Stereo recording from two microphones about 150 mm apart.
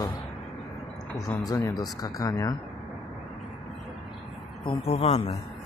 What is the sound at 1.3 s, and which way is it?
Speech, 25° left (ahead or behind).